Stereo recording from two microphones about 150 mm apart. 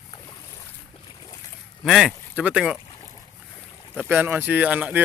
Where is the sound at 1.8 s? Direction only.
Centre (ahead or behind).